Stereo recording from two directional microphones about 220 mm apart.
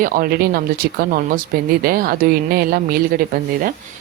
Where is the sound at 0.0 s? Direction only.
40° right (ahead or behind).